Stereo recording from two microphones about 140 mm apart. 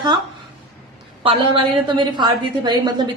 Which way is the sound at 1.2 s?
40° right (ahead or behind).